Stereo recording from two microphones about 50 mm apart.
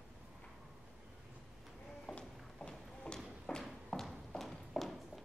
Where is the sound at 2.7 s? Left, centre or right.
Centre.